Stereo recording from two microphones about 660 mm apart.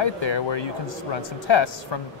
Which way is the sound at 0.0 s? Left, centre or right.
Left.